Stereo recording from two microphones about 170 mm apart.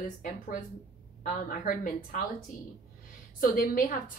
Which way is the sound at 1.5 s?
55° left (ahead or behind).